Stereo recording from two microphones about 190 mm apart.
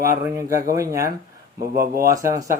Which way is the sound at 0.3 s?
15° right (ahead or behind).